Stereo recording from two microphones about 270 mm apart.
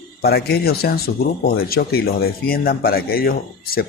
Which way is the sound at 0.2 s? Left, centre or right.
Left.